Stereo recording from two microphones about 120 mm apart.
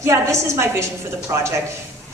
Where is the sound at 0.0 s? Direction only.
25° right (ahead or behind).